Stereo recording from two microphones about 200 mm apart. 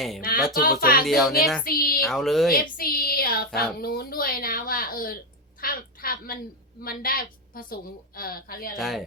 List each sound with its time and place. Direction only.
0.2 s a woman's voice: 45° left (ahead or behind)
1.0 s speech: centre (ahead or behind)
1.6 s a sound: 50° left (ahead or behind)
2.0 s speech: centre (ahead or behind)
2.7 s speech: 45° left (ahead or behind)
5.5 s a sound: 45° left (ahead or behind)
6.8 s a woman's voice: 45° left (ahead or behind)
8.8 s speech: centre (ahead or behind)